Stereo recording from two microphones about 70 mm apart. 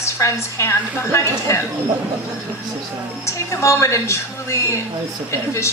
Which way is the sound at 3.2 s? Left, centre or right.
Left.